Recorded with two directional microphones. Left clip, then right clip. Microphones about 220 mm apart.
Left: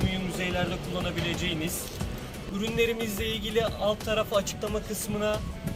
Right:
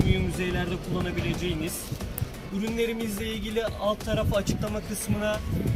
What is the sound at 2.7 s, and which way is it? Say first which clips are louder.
Speech: left 2 dB; 15° left (ahead or behind).